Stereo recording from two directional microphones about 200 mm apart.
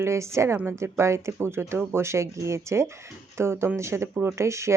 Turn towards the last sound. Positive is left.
turn(degrees=-15)  # may be behind; listen again after turning